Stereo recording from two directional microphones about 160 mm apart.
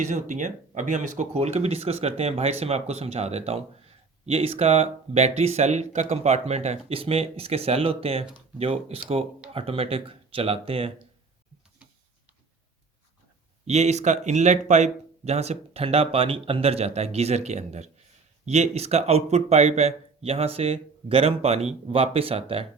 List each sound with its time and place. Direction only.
0.1 s speech: 50° right (ahead or behind)
13.7 s speech: 45° right (ahead or behind)